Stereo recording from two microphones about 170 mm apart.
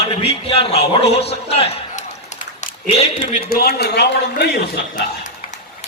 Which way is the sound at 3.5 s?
65° left (ahead or behind).